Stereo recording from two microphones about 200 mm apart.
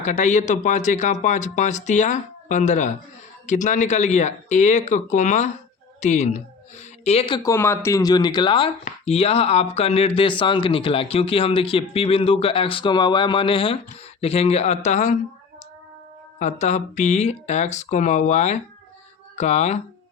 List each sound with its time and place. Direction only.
0.0 s speech: 35° left (ahead or behind)
7.5 s speech: 10° left (ahead or behind); by 15.1 s 35° left (ahead or behind)
16.4 s speech: 35° left (ahead or behind)